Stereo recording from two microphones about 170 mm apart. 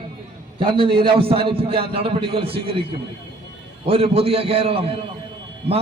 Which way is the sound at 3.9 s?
35° right (ahead or behind).